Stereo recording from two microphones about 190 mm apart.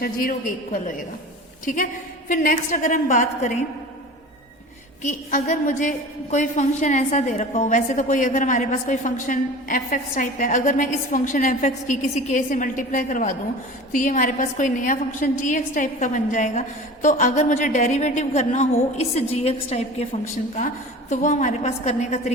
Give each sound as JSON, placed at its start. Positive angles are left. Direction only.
{"t": 0.0, "sound": "a woman's voice", "side_deg": 50}
{"t": 5.0, "sound": "a woman's voice", "side_deg": 40}
{"t": 21.1, "sound": "a woman's voice", "side_deg": 40}